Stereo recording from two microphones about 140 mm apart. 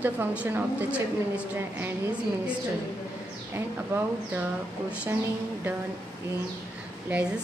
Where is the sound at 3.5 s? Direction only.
15° right (ahead or behind).